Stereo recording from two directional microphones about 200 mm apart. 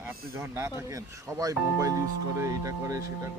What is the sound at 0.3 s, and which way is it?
Speech, 15° right (ahead or behind).